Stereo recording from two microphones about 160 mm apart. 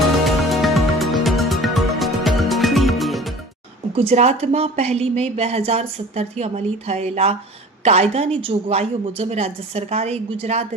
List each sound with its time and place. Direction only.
0.3 s music: centre (ahead or behind)
3.9 s a woman's voice: 40° right (ahead or behind)